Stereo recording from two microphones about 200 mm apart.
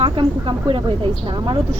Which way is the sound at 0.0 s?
25° right (ahead or behind).